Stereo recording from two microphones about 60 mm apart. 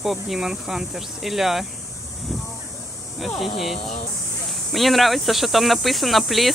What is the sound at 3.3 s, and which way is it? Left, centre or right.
Speech, centre.